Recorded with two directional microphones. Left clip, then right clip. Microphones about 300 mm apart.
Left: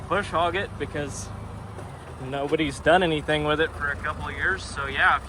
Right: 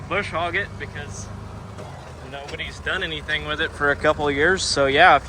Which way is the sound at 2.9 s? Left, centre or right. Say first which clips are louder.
Left 7 dB; left.